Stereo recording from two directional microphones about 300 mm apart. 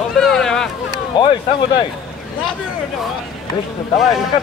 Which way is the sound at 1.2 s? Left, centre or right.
Centre.